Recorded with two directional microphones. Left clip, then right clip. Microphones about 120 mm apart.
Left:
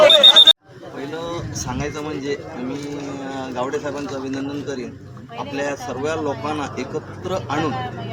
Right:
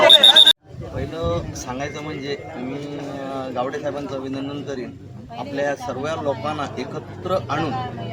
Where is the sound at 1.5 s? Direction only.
25° right (ahead or behind).